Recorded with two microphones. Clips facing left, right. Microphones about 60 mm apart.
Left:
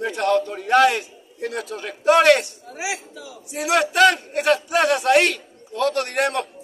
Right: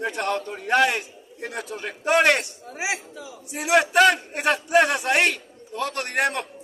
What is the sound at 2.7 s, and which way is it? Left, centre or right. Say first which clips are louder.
Speech: even; right.